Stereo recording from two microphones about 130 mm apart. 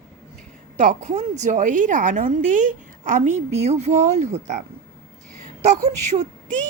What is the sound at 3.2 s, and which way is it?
A woman's voice, 60° right (ahead or behind).